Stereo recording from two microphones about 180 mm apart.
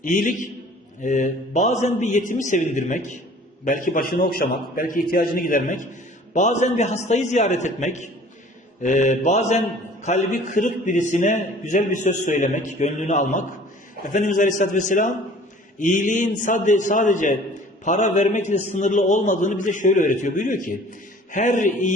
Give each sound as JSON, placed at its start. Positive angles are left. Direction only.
{"t": 0.0, "sound": "a man's voice", "side_deg": 45}